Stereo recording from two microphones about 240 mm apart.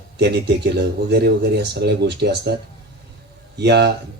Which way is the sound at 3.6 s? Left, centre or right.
Right.